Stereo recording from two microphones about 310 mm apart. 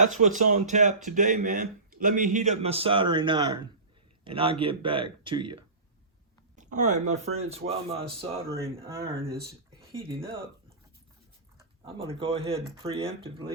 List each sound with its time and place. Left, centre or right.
0.0 s a man's voice: right
11.8 s speech: centre